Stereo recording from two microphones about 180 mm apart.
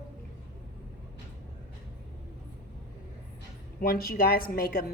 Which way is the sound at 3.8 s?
55° left (ahead or behind).